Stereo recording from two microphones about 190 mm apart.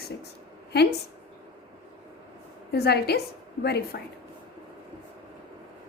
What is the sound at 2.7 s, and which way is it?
A woman's voice, 55° left (ahead or behind).